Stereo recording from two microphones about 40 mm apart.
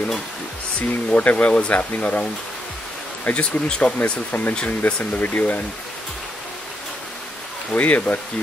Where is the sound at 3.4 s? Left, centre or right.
Left.